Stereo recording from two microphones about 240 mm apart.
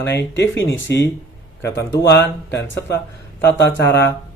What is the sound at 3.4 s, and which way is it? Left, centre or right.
Speech, left.